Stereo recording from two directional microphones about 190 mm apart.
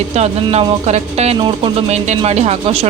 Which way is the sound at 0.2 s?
35° right (ahead or behind).